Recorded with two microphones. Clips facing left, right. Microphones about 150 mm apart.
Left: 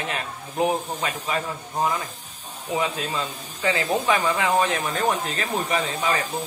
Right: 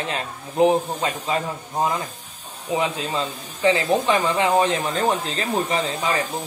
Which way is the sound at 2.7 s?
25° right (ahead or behind).